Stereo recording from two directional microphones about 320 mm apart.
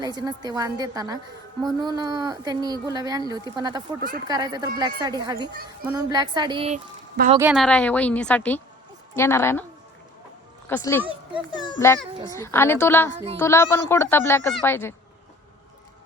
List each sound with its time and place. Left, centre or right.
0.0 s a woman's voice: centre
7.3 s a woman's voice: centre
10.7 s speech: centre
11.0 s a child's voice: centre
11.6 s speech: centre